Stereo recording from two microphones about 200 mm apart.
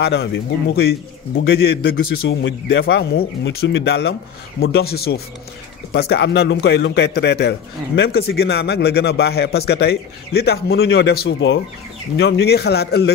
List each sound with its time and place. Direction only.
0.0 s a man's voice: 55° left (ahead or behind)